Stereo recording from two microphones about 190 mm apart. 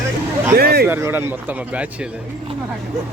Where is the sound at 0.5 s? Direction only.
55° right (ahead or behind).